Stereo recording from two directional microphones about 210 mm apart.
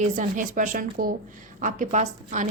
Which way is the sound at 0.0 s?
35° right (ahead or behind).